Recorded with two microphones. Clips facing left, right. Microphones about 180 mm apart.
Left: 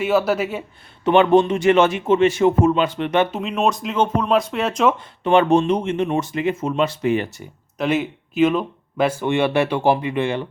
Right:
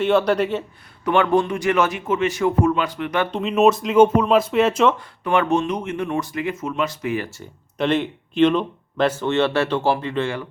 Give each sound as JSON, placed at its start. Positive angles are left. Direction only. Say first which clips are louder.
{"t": 0.0, "sound": "speech", "louder": "right 1 dB", "side_deg": 5}
{"t": 1.0, "sound": "speech", "louder": "left 4 dB", "side_deg": 20}
{"t": 3.3, "sound": "speech", "louder": "right 4 dB", "side_deg": 0}
{"t": 4.9, "sound": "speech", "louder": "left 4 dB", "side_deg": 25}
{"t": 7.8, "sound": "speech", "louder": "even", "side_deg": 5}